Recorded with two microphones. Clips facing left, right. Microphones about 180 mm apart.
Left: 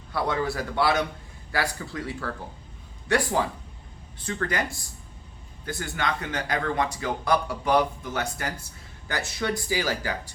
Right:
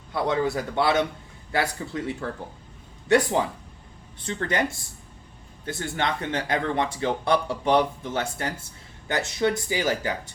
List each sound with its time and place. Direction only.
0.1 s speech: 20° right (ahead or behind)